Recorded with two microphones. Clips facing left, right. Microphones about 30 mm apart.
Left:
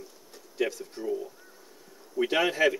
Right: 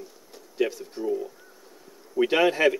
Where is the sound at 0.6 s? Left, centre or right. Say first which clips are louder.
Right 3 dB; centre.